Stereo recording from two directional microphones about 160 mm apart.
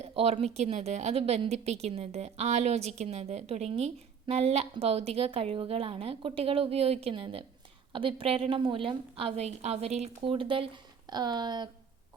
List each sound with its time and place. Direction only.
0.2 s a woman's voice: 40° right (ahead or behind)